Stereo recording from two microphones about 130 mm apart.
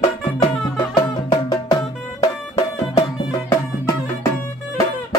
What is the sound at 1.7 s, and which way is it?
Music, 30° left (ahead or behind).